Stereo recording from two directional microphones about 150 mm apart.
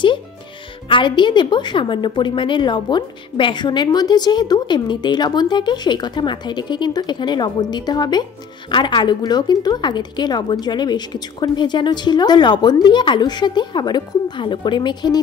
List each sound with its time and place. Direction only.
0.8 s a woman's voice: 35° left (ahead or behind)